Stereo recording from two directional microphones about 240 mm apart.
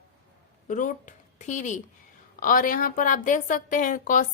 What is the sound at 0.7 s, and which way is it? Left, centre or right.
A woman's voice, left.